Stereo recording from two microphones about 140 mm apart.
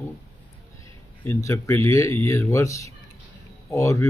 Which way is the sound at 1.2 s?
20° left (ahead or behind).